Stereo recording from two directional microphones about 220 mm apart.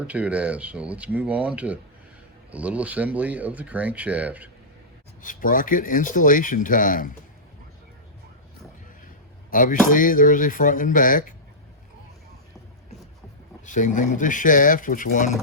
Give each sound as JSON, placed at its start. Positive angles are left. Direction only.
{"t": 0.1, "sound": "speech", "side_deg": -5}
{"t": 5.2, "sound": "speech", "side_deg": 40}
{"t": 9.5, "sound": "speech", "side_deg": 35}
{"t": 13.7, "sound": "speech", "side_deg": 35}